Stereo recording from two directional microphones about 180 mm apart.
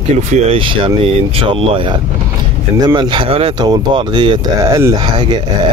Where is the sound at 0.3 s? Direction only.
30° right (ahead or behind).